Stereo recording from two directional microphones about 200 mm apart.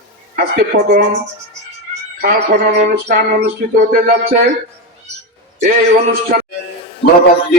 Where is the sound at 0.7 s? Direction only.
50° right (ahead or behind).